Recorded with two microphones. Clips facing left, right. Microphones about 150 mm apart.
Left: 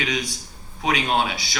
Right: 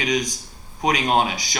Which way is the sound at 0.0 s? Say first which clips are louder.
Right 4 dB; 40° right (ahead or behind).